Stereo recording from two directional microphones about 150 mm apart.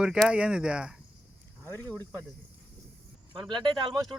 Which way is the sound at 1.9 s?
10° left (ahead or behind).